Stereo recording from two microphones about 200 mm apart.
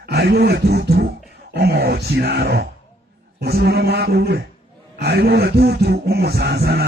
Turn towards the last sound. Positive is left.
turn(degrees=-50)  # may be behind; listen again after turning